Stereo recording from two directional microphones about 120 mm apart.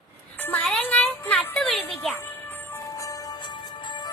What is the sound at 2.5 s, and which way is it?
Music, 20° left (ahead or behind).